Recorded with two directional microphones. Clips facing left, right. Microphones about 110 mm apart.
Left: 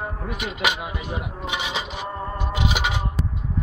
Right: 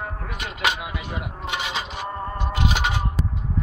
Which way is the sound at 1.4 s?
10° left (ahead or behind).